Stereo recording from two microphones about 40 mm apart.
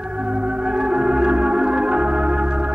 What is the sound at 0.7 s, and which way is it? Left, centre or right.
Organ, right.